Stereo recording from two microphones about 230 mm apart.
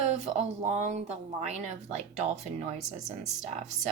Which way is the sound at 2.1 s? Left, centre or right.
Right.